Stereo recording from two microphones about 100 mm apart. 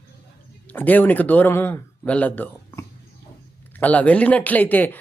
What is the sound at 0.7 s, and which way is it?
A man's voice, 15° left (ahead or behind).